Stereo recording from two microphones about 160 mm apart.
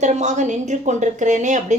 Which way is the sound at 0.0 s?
45° right (ahead or behind).